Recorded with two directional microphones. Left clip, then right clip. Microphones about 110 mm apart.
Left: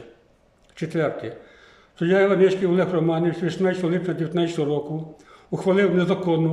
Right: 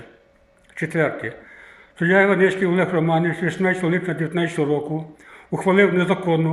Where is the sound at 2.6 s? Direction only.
30° left (ahead or behind).